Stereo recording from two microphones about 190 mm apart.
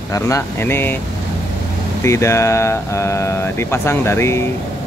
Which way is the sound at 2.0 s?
15° left (ahead or behind).